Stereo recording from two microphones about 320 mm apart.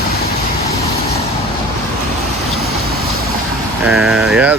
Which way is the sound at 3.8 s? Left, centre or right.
Centre.